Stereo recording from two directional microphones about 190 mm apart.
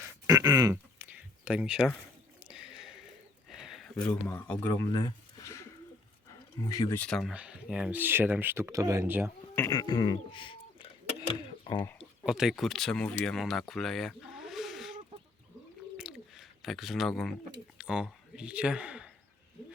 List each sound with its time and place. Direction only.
0.3 s speech: 20° right (ahead or behind)
2.4 s a sound: 5° right (ahead or behind)
4.6 s speech: 15° left (ahead or behind)
7.0 s speech: centre (ahead or behind)
9.6 s bird: 20° left (ahead or behind)
11.9 s speech: 5° right (ahead or behind)
16.0 s a sound: 5° right (ahead or behind)
17.7 s speech: 5° right (ahead or behind)